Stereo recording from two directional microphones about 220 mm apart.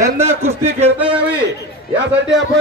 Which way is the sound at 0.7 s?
30° right (ahead or behind).